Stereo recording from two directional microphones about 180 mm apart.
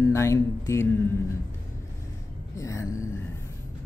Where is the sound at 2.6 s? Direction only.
15° left (ahead or behind).